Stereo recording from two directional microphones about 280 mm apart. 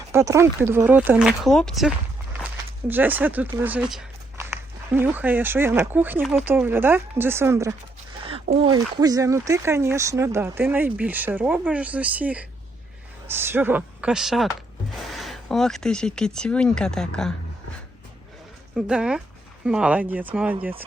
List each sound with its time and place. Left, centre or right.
0.1 s speech: centre
2.9 s speech: centre
18.8 s speech: centre